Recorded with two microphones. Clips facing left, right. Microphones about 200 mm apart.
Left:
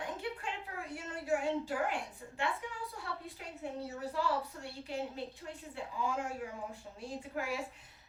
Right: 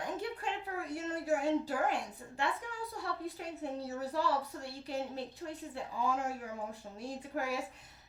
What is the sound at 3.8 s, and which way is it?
A woman's voice, 35° right (ahead or behind).